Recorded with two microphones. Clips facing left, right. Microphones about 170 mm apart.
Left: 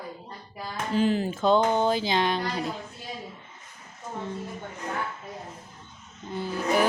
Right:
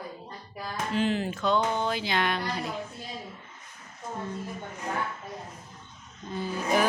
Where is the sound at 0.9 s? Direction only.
35° left (ahead or behind).